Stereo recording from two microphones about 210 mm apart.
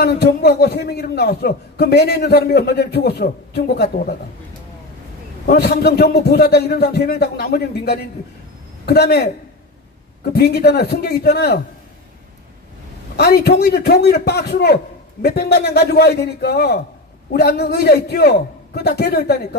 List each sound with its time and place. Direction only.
0.0 s a man's voice: 50° left (ahead or behind)
5.5 s a man's voice: 50° left (ahead or behind)
10.3 s a man's voice: 50° left (ahead or behind)
13.1 s a man's voice: 50° left (ahead or behind)